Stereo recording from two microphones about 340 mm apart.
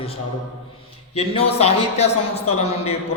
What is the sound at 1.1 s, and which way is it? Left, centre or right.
A man's voice, centre.